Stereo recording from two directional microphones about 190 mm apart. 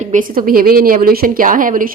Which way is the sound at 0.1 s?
45° right (ahead or behind).